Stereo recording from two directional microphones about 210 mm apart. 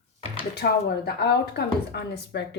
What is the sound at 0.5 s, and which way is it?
A woman's voice, 50° left (ahead or behind).